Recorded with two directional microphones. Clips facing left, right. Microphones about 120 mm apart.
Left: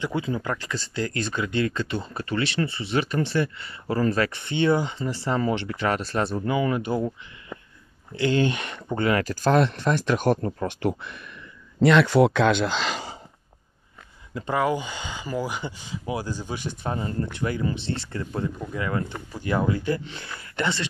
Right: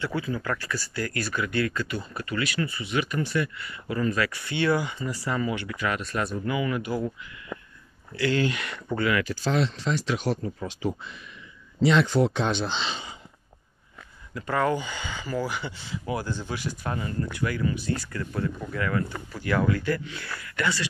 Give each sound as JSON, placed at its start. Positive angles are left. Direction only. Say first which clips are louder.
{"t": 0.0, "sound": "speech", "louder": "left 2 dB", "side_deg": 20}
{"t": 8.2, "sound": "speech", "louder": "left 3 dB", "side_deg": 25}
{"t": 9.0, "sound": "speech", "louder": "left 4 dB", "side_deg": 40}
{"t": 10.6, "sound": "speech", "louder": "left 4 dB", "side_deg": 65}
{"t": 14.3, "sound": "speech", "louder": "left 1 dB", "side_deg": 25}